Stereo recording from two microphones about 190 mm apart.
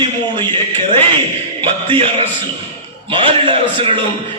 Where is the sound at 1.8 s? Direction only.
30° right (ahead or behind).